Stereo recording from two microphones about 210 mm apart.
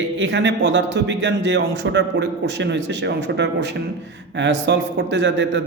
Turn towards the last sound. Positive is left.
turn(degrees=-55)  # may be behind; listen again after turning